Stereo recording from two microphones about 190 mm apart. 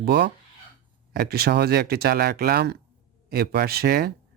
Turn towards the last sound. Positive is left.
turn(degrees=-55)  # may be behind; listen again after turning